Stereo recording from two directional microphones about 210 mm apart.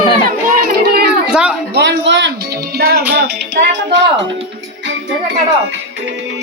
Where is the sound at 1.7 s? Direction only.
55° right (ahead or behind).